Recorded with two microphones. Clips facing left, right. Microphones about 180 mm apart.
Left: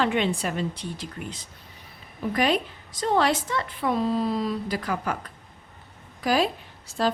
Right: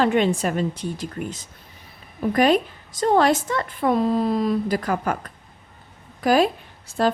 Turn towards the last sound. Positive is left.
turn(degrees=-55)  # may be behind; listen again after turning